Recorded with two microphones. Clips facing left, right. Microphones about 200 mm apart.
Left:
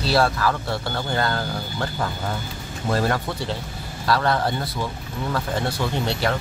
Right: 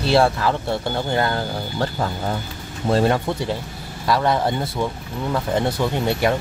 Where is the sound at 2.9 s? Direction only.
25° right (ahead or behind).